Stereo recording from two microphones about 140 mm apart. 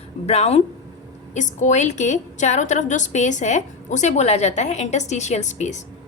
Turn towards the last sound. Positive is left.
turn(degrees=55)  # may be behind; listen again after turning